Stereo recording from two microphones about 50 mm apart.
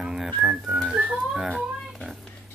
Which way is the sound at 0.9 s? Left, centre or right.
Right.